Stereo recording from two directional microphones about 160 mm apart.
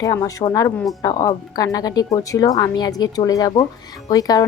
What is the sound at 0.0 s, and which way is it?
Speech, 20° left (ahead or behind).